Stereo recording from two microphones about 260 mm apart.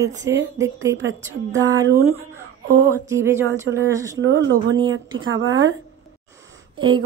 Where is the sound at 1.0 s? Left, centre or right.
Right.